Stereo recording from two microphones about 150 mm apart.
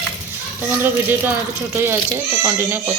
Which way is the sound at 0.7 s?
15° right (ahead or behind).